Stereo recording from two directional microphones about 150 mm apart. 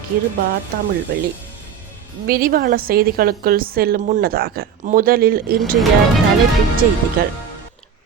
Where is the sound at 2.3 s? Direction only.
75° right (ahead or behind).